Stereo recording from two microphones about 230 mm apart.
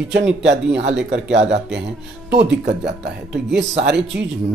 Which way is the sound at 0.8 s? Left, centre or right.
Right.